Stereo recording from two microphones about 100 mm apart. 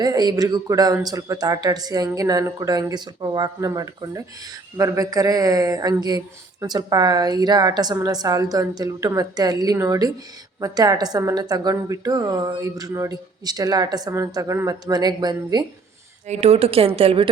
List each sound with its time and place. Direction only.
0.0 s speech: 40° right (ahead or behind)
16.3 s speech: 90° right